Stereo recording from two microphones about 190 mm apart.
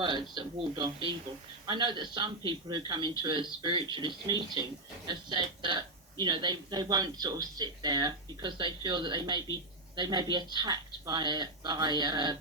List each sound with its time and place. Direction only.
0.0 s a man's voice: 25° right (ahead or behind)